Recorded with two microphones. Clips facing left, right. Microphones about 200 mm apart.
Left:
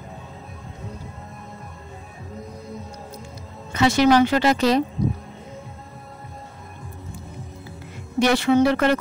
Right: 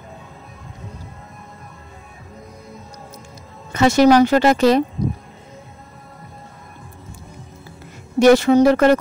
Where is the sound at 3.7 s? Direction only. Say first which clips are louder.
Right 4 dB; 45° right (ahead or behind).